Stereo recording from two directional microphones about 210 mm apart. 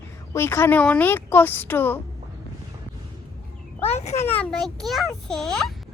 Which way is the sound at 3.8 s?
30° left (ahead or behind).